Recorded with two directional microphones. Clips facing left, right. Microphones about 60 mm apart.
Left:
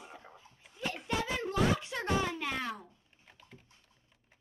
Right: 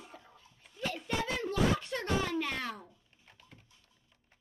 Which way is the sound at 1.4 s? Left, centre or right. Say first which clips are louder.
Even; centre.